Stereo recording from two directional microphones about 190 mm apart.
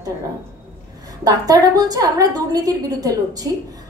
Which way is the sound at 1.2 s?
20° right (ahead or behind).